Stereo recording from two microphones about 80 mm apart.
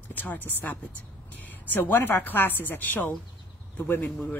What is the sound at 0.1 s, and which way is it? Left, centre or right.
Speech, left.